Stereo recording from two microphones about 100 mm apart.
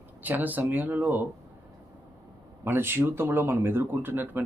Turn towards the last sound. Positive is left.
turn(degrees=-20)  # may be behind; listen again after turning